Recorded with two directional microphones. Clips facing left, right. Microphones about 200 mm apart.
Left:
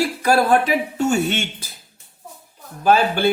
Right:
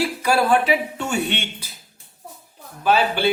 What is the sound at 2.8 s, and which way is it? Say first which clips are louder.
Speech: left 2 dB; 45° left (ahead or behind).